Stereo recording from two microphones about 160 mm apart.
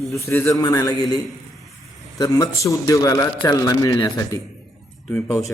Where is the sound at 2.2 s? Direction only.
25° left (ahead or behind).